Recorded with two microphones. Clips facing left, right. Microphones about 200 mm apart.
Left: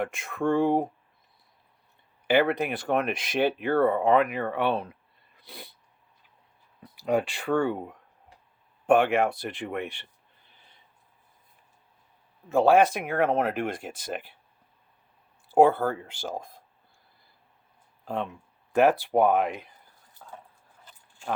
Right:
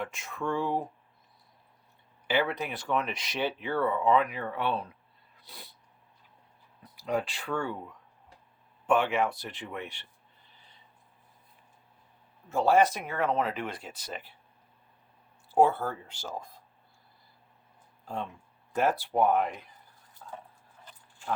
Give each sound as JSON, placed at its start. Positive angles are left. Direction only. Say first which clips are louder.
{"t": 0.0, "sound": "speech", "louder": "left 7 dB", "side_deg": 55}
{"t": 2.2, "sound": "speech", "louder": "left 6 dB", "side_deg": 55}
{"t": 7.0, "sound": "speech", "louder": "left 5 dB", "side_deg": 55}
{"t": 12.5, "sound": "speech", "louder": "left 4 dB", "side_deg": 55}
{"t": 15.5, "sound": "speech", "louder": "left 5 dB", "side_deg": 55}
{"t": 18.7, "sound": "speech", "louder": "left 7 dB", "side_deg": 60}
{"t": 20.2, "sound": "dog", "louder": "right 2 dB", "side_deg": 60}